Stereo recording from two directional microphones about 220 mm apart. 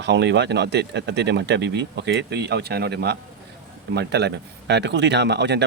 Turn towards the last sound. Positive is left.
turn(degrees=-50)  # may be behind; listen again after turning